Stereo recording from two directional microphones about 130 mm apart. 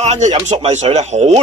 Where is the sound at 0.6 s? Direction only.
55° right (ahead or behind).